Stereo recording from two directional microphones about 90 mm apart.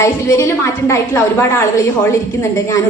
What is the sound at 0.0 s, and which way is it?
A woman's voice, 35° left (ahead or behind).